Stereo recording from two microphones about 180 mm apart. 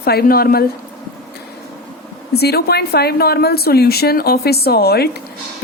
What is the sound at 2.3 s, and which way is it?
Speech, 60° left (ahead or behind).